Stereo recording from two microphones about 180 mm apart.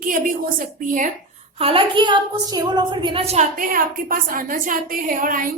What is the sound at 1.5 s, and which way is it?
A woman's voice, 30° right (ahead or behind).